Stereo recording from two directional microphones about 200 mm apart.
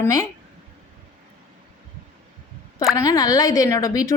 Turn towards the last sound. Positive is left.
turn(degrees=15)  # may be behind; listen again after turning